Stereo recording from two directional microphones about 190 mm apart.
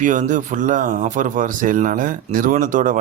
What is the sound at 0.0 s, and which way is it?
Speech, 40° right (ahead or behind).